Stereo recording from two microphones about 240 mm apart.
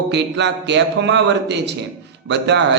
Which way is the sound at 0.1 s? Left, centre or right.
Right.